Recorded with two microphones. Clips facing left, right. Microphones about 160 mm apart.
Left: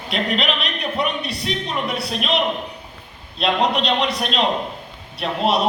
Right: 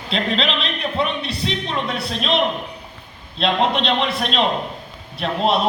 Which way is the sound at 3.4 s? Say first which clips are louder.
Even; 30° right (ahead or behind).